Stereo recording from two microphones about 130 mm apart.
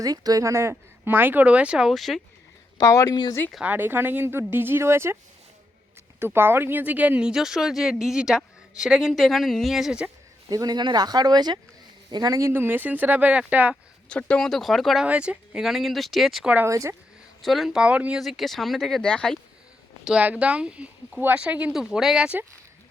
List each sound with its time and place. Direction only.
0.0 s speech: 30° right (ahead or behind); by 2.2 s centre (ahead or behind)
2.7 s speech: 25° left (ahead or behind)
3.5 s speech: 10° right (ahead or behind)
6.1 s speech: 15° right (ahead or behind)
10.5 s speech: 30° right (ahead or behind); by 13.7 s 10° right (ahead or behind)
14.1 s speech: 10° left (ahead or behind)
16.6 s speech: 25° right (ahead or behind)
17.4 s speech: centre (ahead or behind)
20.1 s speech: 10° right (ahead or behind)